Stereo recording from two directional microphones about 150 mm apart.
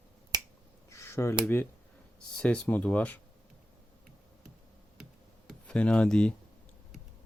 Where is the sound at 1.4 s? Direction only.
15° left (ahead or behind).